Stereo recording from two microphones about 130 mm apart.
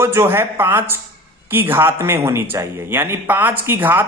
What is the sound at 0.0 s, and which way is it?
A man's voice, 20° right (ahead or behind).